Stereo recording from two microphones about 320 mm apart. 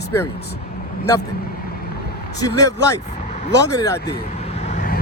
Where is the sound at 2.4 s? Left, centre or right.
Centre.